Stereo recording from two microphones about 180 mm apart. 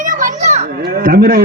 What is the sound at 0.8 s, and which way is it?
Speech, 55° right (ahead or behind).